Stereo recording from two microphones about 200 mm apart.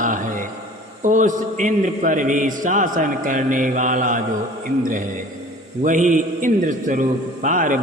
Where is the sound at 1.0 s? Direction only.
40° right (ahead or behind).